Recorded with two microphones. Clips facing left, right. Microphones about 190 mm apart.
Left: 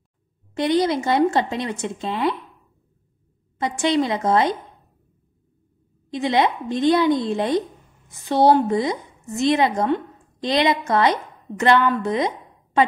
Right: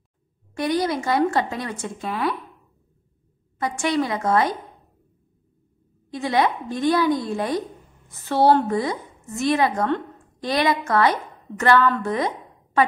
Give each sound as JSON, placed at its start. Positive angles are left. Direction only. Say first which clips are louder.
{"t": 0.6, "sound": "a woman's voice", "louder": "left 3 dB", "side_deg": 25}
{"t": 3.5, "sound": "a woman's voice", "louder": "left 2 dB", "side_deg": 20}
{"t": 6.1, "sound": "a woman's voice", "louder": "left 2 dB", "side_deg": 20}